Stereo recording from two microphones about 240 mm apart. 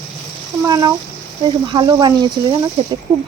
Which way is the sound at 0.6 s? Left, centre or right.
Centre.